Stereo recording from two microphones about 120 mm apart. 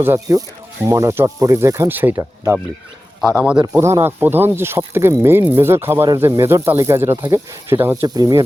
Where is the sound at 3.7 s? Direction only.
25° right (ahead or behind).